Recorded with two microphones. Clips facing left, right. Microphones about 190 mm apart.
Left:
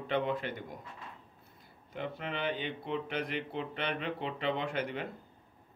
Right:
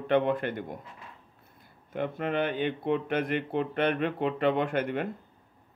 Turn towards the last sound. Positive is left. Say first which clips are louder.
# right 7 dB
turn(degrees=-55)  # may be behind; listen again after turning